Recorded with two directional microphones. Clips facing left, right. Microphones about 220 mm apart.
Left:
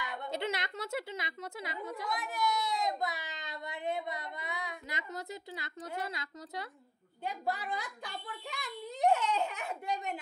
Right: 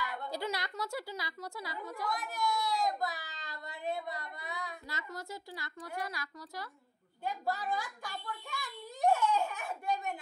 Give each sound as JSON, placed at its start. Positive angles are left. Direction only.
{"t": 0.0, "sound": "a woman's voice", "side_deg": 20}